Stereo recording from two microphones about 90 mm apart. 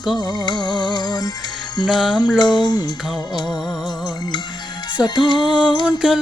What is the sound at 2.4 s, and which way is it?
Music, 55° left (ahead or behind).